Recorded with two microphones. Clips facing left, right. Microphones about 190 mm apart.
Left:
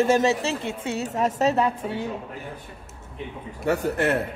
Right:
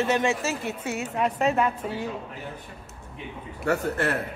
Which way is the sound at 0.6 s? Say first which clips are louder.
Left 2 dB; 30° left (ahead or behind).